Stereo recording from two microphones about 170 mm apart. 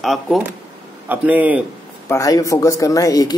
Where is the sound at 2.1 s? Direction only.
20° left (ahead or behind).